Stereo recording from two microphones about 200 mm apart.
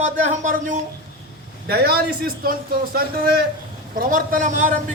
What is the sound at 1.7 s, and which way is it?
Speech, 50° right (ahead or behind).